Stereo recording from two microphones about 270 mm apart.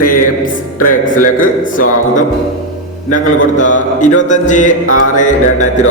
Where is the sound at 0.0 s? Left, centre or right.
Left.